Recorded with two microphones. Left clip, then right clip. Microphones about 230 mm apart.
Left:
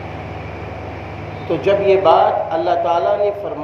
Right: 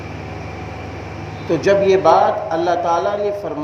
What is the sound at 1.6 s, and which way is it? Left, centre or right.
A man's voice, right.